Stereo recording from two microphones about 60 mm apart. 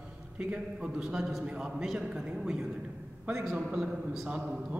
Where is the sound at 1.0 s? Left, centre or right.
Centre.